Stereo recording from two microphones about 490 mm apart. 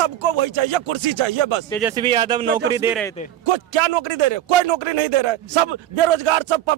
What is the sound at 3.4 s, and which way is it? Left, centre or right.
A man's voice, right.